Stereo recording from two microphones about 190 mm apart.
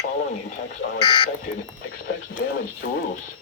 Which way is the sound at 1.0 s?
25° left (ahead or behind).